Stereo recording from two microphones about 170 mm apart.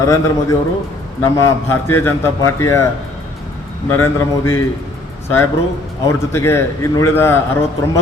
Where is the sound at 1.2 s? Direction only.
20° left (ahead or behind).